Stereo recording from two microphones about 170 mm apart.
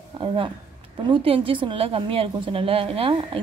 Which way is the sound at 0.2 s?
30° right (ahead or behind).